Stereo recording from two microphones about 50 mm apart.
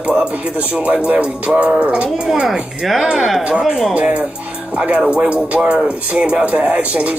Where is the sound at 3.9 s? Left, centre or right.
Right.